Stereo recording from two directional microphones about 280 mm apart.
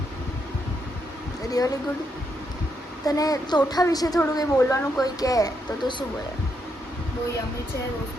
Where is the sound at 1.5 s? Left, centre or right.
Centre.